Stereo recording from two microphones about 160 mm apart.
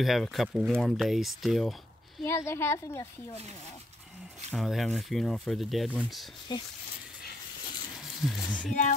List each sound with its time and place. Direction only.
0.0 s speech: centre (ahead or behind)
2.2 s speech: 15° left (ahead or behind)
4.5 s speech: centre (ahead or behind)
6.5 s speech: 30° left (ahead or behind)
8.0 s speech: centre (ahead or behind)